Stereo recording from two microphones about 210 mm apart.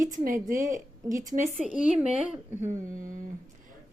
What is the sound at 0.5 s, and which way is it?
A woman's voice, 15° right (ahead or behind).